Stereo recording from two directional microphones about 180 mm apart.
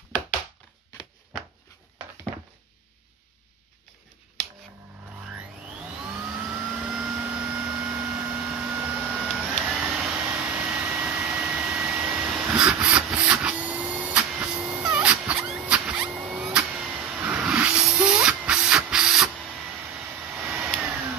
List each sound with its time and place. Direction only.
6.5 s vehicle: 5° right (ahead or behind)
10.6 s vacuum cleaner: 10° right (ahead or behind)